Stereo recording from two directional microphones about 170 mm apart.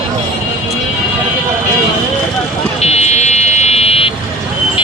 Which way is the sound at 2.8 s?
40° left (ahead or behind).